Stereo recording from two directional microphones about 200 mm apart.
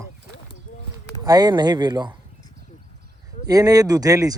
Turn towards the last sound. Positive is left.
turn(degrees=-15)  # may be behind; listen again after turning